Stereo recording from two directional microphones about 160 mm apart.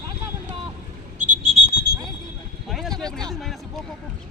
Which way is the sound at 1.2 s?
50° right (ahead or behind).